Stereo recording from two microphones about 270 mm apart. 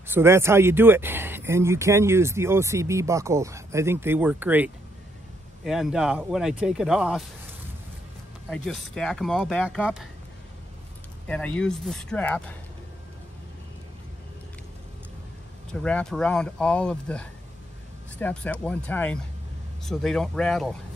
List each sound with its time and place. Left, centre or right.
0.0 s speech: centre
5.7 s speech: centre
8.5 s speech: centre
11.2 s speech: centre
15.7 s speech: centre